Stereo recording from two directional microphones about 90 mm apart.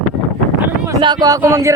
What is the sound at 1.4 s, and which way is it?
Speech, 35° right (ahead or behind).